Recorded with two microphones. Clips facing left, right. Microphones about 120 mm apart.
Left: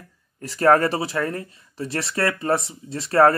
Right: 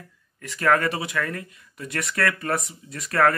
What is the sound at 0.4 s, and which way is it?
Speech, 35° left (ahead or behind).